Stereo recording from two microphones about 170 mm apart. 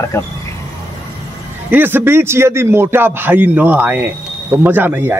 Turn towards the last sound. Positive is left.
turn(degrees=-10)  # may be behind; listen again after turning